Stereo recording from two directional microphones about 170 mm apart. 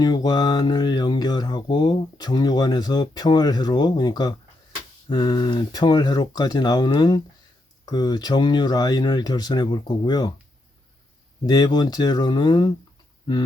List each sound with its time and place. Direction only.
0.0 s mantra: 25° left (ahead or behind)
11.4 s mantra: 25° left (ahead or behind)